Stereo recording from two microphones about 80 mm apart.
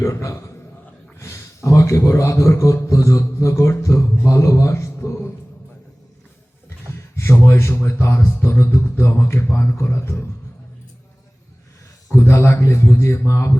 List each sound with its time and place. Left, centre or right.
0.0 s a man's voice: left
7.2 s speech: left
12.1 s speech: left